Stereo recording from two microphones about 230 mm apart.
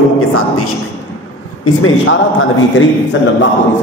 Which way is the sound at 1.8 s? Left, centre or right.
Left.